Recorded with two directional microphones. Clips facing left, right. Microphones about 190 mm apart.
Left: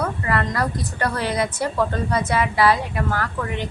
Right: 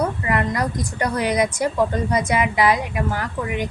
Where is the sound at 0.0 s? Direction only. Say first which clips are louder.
Right 2 dB; 15° right (ahead or behind).